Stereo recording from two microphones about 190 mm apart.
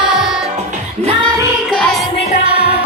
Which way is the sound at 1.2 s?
20° right (ahead or behind).